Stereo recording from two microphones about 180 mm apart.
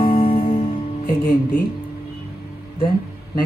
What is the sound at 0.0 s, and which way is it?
Music, 30° left (ahead or behind).